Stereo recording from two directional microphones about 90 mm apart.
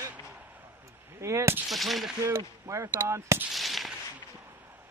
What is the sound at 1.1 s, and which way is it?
Speech, 30° right (ahead or behind).